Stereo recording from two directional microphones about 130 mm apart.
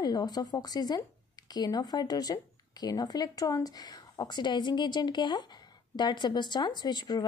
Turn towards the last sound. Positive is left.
turn(degrees=30)  # may be behind; listen again after turning